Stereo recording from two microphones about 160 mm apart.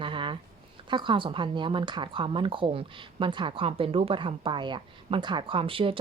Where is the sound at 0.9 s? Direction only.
30° right (ahead or behind).